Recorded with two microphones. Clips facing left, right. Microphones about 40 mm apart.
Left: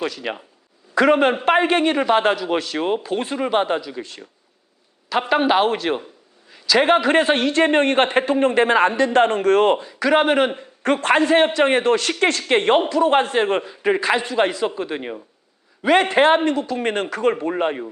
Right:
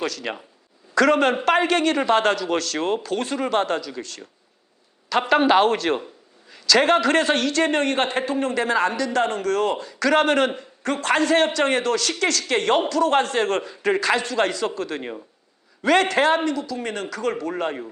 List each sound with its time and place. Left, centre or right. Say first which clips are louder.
0.0 s a man's voice: left 2 dB; centre
5.3 s a man's voice: right 1 dB; centre; by 9.8 s left
9.8 s speech: left 2 dB; centre
10.8 s a man's voice: left 4 dB; left